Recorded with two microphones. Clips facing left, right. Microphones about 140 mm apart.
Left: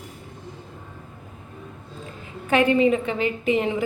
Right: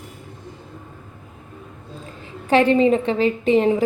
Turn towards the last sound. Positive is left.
turn(degrees=-35)  # may be behind; listen again after turning